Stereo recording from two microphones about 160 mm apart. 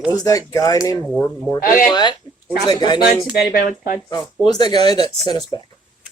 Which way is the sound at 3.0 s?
5° right (ahead or behind).